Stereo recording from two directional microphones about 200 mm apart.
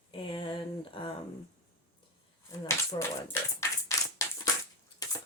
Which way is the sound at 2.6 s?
15° left (ahead or behind).